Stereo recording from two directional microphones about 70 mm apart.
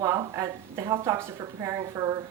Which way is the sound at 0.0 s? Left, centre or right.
Right.